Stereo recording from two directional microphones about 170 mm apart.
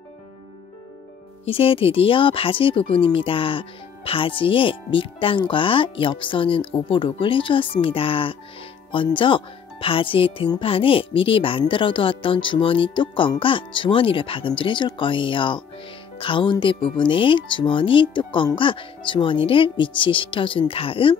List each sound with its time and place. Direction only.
1.4 s speech: 35° left (ahead or behind)